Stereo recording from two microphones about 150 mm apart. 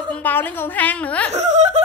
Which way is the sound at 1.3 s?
50° right (ahead or behind).